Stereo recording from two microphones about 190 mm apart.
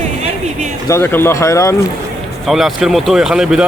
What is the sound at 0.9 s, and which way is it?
Speech, 10° left (ahead or behind).